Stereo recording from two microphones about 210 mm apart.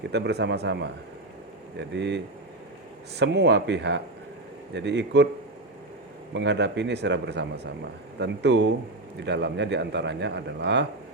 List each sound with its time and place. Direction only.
0.1 s speech: 55° right (ahead or behind)
6.3 s speech: 55° right (ahead or behind)